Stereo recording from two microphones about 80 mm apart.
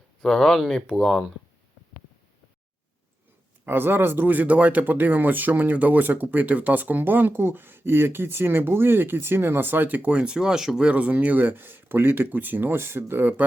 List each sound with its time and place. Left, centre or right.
0.2 s speech: centre
3.7 s speech: right